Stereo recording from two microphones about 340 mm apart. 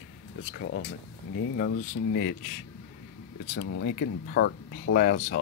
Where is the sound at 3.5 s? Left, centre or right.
Left.